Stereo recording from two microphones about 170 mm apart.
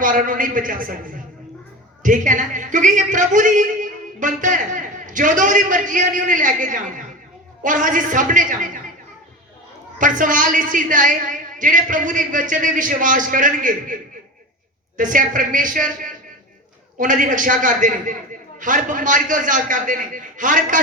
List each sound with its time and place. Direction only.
0.0 s speech: 55° right (ahead or behind)
10.0 s speech: 50° right (ahead or behind)